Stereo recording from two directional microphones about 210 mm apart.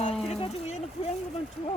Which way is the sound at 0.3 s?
30° left (ahead or behind).